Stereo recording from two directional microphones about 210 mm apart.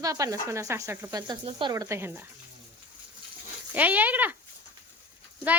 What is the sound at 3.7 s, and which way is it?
Speech, 10° right (ahead or behind).